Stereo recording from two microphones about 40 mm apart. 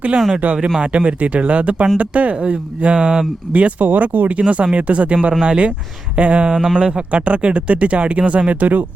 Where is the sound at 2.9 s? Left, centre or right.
Centre.